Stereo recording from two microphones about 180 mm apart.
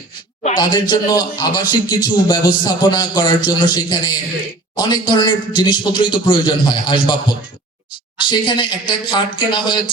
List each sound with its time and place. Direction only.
0.5 s a man's voice: 25° left (ahead or behind)